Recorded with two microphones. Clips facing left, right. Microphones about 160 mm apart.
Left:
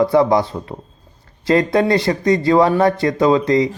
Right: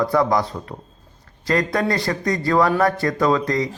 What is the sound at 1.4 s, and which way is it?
Speech, 25° left (ahead or behind).